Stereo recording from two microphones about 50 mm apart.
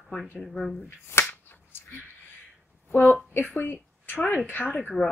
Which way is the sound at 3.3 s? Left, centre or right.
Left.